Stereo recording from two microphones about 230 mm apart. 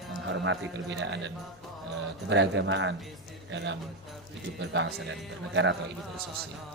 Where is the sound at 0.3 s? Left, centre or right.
Right.